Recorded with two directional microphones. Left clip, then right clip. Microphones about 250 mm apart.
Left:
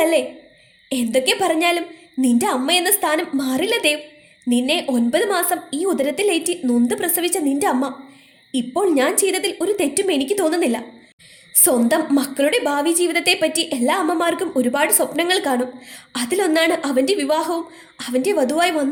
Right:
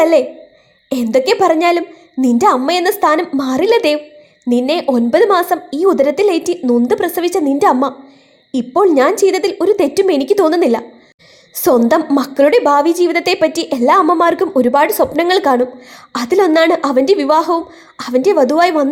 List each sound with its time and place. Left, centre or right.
0.0 s a woman's voice: right